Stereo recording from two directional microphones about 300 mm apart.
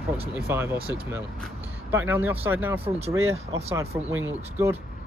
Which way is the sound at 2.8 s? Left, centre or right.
Right.